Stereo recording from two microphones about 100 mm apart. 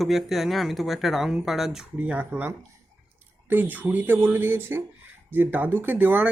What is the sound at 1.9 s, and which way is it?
Speech, 15° right (ahead or behind).